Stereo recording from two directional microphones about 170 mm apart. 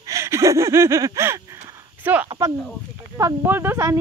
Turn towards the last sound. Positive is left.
turn(degrees=-15)  # may be behind; listen again after turning